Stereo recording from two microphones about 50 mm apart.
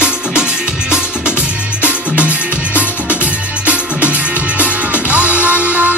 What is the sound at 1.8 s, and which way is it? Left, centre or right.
Music, right.